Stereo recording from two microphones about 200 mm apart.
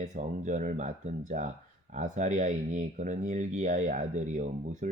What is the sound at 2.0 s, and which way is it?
Speech, 40° right (ahead or behind).